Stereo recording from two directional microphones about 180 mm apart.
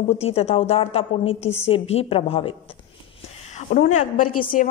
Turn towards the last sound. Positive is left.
turn(degrees=50)  # may be behind; listen again after turning